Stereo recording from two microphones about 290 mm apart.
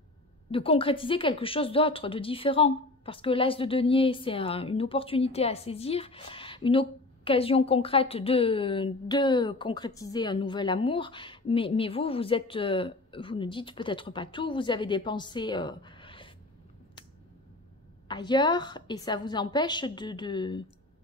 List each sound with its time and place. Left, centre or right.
0.5 s speech: centre
18.0 s speech: centre